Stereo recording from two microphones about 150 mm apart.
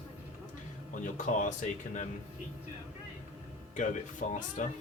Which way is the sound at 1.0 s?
55° left (ahead or behind).